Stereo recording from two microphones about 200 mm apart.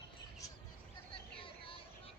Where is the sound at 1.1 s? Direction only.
25° left (ahead or behind).